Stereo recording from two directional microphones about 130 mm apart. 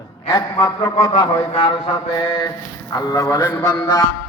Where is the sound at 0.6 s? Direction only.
30° left (ahead or behind).